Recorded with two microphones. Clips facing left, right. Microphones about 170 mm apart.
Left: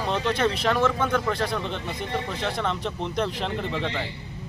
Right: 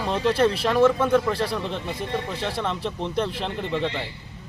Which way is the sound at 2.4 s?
5° right (ahead or behind).